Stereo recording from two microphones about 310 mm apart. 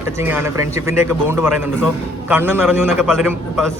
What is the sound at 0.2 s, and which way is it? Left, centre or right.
A man's voice, centre.